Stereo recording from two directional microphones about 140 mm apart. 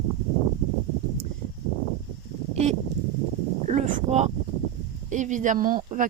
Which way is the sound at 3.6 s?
55° right (ahead or behind).